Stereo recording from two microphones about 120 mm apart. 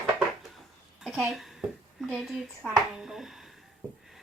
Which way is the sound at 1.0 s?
5° right (ahead or behind).